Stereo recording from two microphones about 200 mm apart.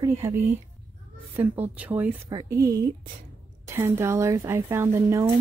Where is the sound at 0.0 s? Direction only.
15° right (ahead or behind).